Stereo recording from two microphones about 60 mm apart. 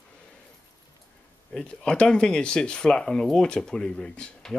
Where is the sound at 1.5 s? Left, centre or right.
Centre.